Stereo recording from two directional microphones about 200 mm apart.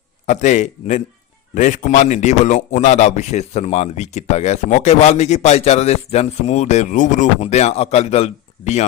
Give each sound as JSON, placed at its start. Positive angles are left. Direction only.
{"t": 0.3, "sound": "speech", "side_deg": 35}